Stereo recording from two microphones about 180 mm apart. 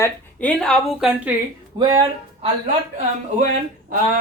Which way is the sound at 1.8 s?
25° right (ahead or behind).